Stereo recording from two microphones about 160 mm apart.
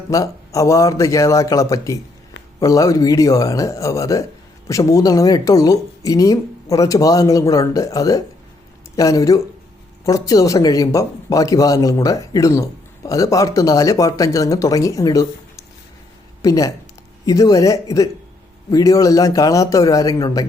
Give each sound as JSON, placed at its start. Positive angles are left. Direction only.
{"t": 0.1, "sound": "speech", "side_deg": 20}